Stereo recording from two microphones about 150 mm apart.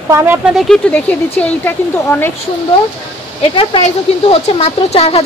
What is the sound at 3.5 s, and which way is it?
Speech, 35° left (ahead or behind).